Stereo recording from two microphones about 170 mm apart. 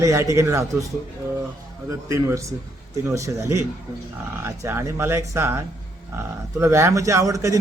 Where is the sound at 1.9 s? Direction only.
15° right (ahead or behind).